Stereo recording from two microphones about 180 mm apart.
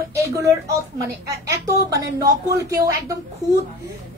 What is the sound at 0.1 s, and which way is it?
Speech, 15° right (ahead or behind).